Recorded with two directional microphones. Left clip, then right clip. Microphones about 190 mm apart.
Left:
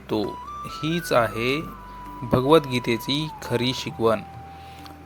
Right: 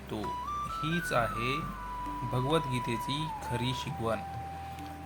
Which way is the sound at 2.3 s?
55° left (ahead or behind).